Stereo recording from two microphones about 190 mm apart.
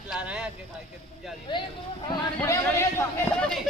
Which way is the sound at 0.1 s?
5° right (ahead or behind).